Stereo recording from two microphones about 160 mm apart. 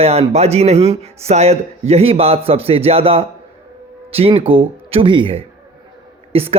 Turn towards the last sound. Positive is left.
turn(degrees=-40)  # may be behind; listen again after turning